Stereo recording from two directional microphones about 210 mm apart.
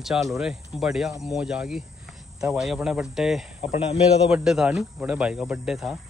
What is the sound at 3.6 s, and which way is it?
Speech, 30° left (ahead or behind).